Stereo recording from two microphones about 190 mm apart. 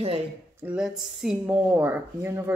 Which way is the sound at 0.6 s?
5° right (ahead or behind).